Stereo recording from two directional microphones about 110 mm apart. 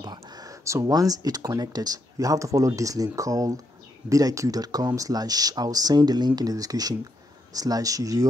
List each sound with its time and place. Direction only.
0.0 s speech: 40° right (ahead or behind)